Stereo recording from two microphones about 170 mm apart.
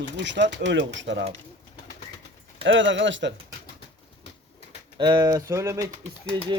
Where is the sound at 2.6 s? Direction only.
90° right.